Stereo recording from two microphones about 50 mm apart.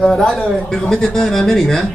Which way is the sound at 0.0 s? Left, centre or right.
Centre.